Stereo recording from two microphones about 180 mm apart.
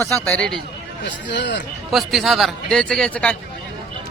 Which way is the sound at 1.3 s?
75° left (ahead or behind).